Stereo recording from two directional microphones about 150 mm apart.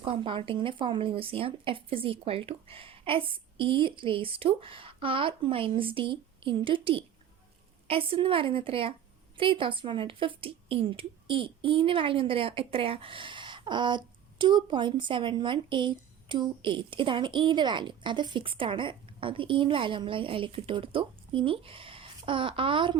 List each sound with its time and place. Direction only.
0.0 s a woman's voice: 35° right (ahead or behind)